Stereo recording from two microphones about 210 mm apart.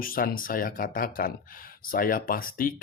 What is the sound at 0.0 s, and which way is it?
Speech, 45° left (ahead or behind).